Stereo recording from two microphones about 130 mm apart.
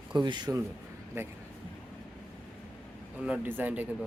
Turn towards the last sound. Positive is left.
turn(degrees=-15)  # may be behind; listen again after turning